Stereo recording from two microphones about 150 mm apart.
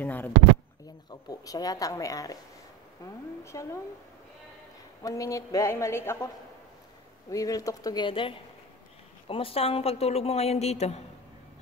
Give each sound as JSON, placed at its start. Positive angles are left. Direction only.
{"t": 0.0, "sound": "a sound", "side_deg": 10}
{"t": 1.3, "sound": "a woman's voice", "side_deg": 25}
{"t": 3.5, "sound": "a woman's voice", "side_deg": 20}
{"t": 5.0, "sound": "a woman's voice", "side_deg": 20}